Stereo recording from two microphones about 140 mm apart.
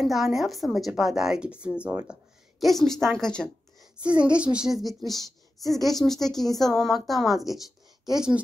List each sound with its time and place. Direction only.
0.0 s a woman's voice: centre (ahead or behind)
2.6 s a woman's voice: centre (ahead or behind)
4.0 s a woman's voice: 10° right (ahead or behind)